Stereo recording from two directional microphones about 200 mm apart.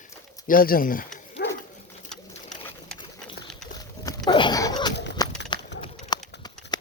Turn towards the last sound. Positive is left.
turn(degrees=20)  # may be behind; listen again after turning